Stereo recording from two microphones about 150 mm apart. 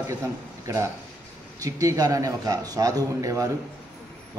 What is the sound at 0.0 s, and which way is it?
A man's voice, 20° right (ahead or behind).